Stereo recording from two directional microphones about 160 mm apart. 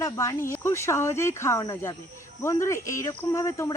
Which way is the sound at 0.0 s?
20° left (ahead or behind).